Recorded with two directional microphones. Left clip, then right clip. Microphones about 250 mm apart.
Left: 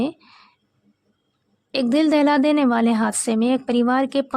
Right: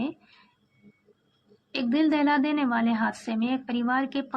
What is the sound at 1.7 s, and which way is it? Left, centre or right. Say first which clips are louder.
Speech: left 7 dB; left.